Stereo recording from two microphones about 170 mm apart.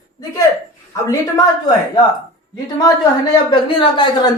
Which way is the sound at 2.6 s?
25° left (ahead or behind).